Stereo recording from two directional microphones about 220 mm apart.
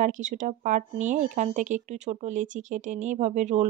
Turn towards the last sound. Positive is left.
turn(degrees=-30)  # may be behind; listen again after turning